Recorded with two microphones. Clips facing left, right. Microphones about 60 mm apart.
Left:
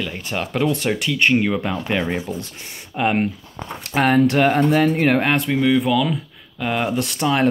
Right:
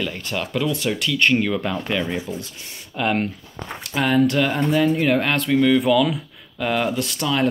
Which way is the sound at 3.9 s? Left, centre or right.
Left.